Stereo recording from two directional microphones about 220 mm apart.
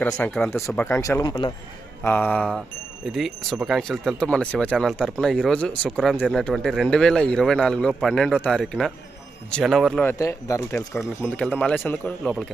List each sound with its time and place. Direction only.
0.0 s speech: 5° left (ahead or behind)
2.0 s speech: 10° left (ahead or behind)